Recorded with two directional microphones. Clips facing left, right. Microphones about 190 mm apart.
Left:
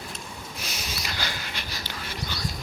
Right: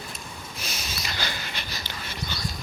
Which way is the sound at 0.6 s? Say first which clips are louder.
Even; 10° left (ahead or behind).